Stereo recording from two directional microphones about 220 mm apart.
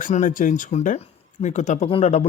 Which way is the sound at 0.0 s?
35° left (ahead or behind).